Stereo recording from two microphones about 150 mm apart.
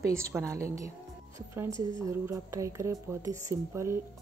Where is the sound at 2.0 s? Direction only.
20° right (ahead or behind).